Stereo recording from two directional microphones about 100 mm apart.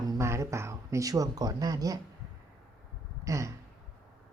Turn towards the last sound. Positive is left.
turn(degrees=-35)  # may be behind; listen again after turning